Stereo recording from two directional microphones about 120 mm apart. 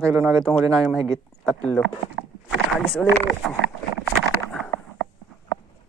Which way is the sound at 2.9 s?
5° left (ahead or behind).